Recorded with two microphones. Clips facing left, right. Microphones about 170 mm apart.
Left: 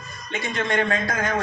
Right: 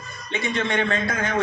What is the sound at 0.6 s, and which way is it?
Speech, 45° left (ahead or behind).